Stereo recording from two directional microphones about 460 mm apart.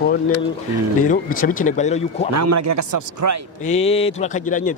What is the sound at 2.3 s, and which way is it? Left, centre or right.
Speech, right.